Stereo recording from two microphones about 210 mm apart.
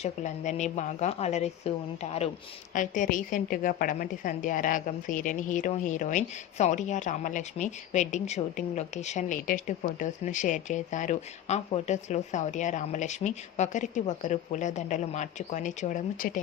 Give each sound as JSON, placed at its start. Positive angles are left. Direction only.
{"t": 0.0, "sound": "a woman's voice", "side_deg": 35}